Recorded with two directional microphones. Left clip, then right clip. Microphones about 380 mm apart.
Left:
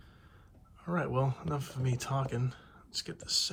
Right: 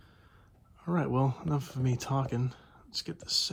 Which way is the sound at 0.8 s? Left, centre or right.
Centre.